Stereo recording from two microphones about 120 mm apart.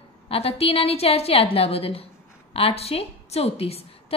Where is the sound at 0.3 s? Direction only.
55° left (ahead or behind).